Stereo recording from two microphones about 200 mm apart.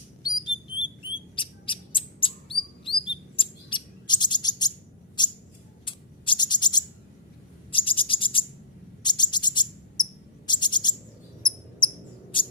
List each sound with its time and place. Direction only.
0.2 s bird: 20° left (ahead or behind)
1.4 s chirp: 25° left (ahead or behind)
5.2 s a sound: 20° left (ahead or behind)
7.7 s bird: 25° left (ahead or behind)
9.0 s cricket: 20° left (ahead or behind)